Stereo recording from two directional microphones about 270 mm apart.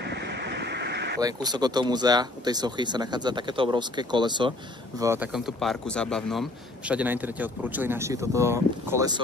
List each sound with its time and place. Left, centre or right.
0.0 s vehicle: right
1.2 s speech: centre